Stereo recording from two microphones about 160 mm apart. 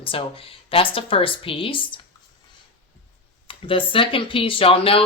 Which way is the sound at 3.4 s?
35° left (ahead or behind).